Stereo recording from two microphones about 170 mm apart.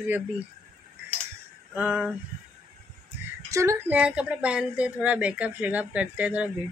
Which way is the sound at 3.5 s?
15° right (ahead or behind).